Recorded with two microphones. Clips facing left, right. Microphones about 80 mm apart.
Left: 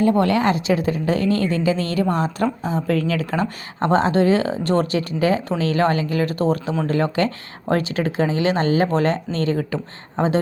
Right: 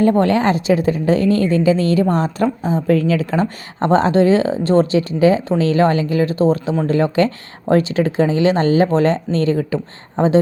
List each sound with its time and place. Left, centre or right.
0.2 s speech: right